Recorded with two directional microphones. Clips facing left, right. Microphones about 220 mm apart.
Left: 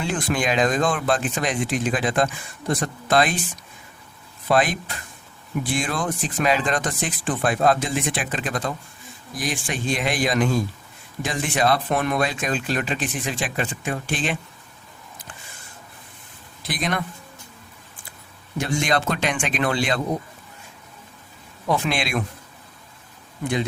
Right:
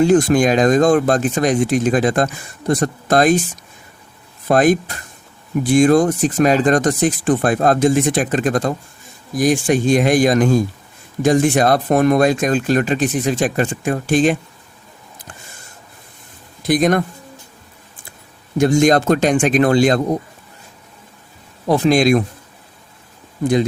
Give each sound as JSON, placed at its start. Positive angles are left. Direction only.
{"t": 0.0, "sound": "speech", "side_deg": -45}
{"t": 4.4, "sound": "speech", "side_deg": -45}
{"t": 16.6, "sound": "speech", "side_deg": -45}
{"t": 18.5, "sound": "speech", "side_deg": -45}
{"t": 21.7, "sound": "a man's voice", "side_deg": -40}